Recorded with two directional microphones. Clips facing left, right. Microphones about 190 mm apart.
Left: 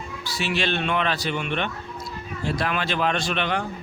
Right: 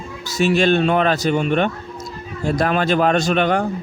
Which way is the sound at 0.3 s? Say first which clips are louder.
Right 10 dB; 45° right (ahead or behind).